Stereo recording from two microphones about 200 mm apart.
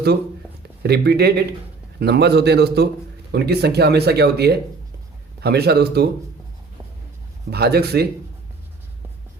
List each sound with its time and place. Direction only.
0.8 s a man's voice: 55° right (ahead or behind)
7.5 s speech: 55° right (ahead or behind)